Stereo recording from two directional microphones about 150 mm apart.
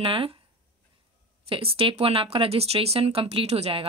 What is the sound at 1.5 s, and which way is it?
Speech, 40° right (ahead or behind).